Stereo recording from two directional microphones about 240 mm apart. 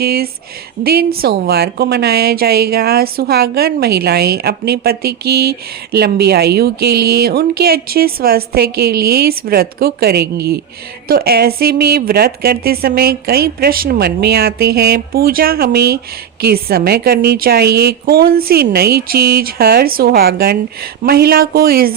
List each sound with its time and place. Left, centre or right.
0.0 s a woman's voice: right